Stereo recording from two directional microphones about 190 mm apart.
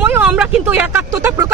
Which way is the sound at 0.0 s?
10° right (ahead or behind).